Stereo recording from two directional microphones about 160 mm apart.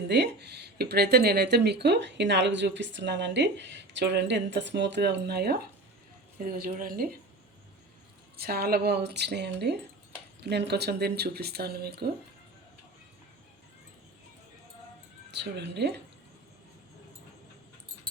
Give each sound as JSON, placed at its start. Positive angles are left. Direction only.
{"t": 0.1, "sound": "speech", "side_deg": -90}
{"t": 6.7, "sound": "speech", "side_deg": -60}
{"t": 8.4, "sound": "speech", "side_deg": -75}
{"t": 15.3, "sound": "speech", "side_deg": -90}